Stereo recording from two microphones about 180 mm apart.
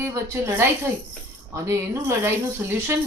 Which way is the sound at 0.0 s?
15° right (ahead or behind).